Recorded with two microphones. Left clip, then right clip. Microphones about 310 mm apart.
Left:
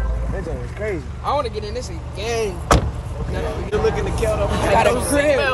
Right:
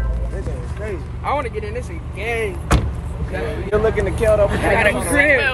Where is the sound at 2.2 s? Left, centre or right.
Centre.